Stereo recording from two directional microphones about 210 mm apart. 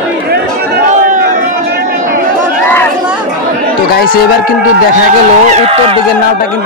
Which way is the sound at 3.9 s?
45° left (ahead or behind).